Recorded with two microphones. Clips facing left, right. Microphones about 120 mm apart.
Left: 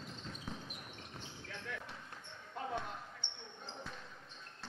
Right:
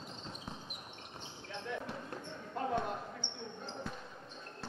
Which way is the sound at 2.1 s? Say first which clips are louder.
Right 7 dB; 50° right (ahead or behind).